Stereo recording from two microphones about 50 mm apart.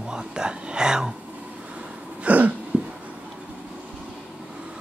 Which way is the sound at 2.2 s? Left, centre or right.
Right.